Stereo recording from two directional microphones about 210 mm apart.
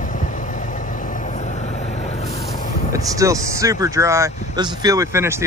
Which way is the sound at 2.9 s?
15° right (ahead or behind).